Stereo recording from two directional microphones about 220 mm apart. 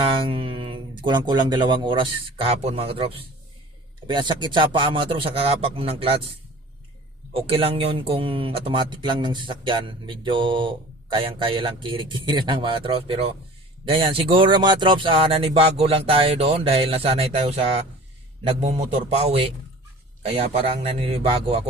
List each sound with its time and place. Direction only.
0.0 s speech: 25° right (ahead or behind)
7.3 s speech: 25° right (ahead or behind)